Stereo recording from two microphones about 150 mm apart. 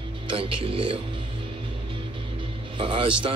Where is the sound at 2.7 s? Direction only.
35° right (ahead or behind).